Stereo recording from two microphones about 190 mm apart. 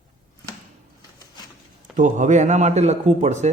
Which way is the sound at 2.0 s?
40° right (ahead or behind).